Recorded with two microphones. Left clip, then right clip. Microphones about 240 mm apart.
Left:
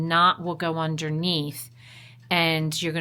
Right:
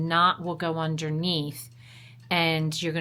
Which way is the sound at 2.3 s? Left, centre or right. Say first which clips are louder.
Left 2 dB; centre.